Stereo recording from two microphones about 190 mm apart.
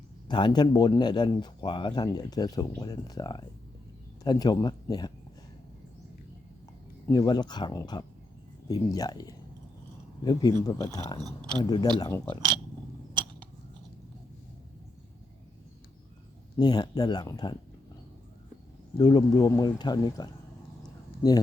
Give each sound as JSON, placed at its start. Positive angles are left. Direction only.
{"t": 0.3, "sound": "speech", "side_deg": 25}
{"t": 7.1, "sound": "speech", "side_deg": 20}
{"t": 11.2, "sound": "speech", "side_deg": -20}
{"t": 11.6, "sound": "speech", "side_deg": 20}
{"t": 16.6, "sound": "speech", "side_deg": 20}
{"t": 18.9, "sound": "speech", "side_deg": 20}